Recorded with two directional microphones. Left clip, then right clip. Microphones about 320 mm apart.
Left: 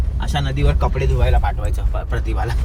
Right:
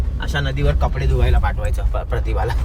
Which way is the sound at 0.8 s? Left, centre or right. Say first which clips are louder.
Left 1 dB; centre.